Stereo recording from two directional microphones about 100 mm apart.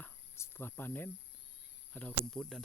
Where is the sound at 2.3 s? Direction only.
Centre (ahead or behind).